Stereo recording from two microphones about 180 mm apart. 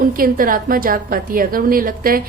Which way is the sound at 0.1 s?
50° right (ahead or behind).